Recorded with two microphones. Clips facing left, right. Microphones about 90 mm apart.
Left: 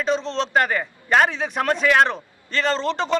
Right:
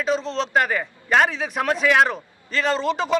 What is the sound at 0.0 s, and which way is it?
A man's voice, 5° right (ahead or behind).